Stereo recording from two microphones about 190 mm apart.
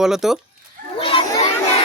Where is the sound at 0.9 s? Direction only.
25° left (ahead or behind).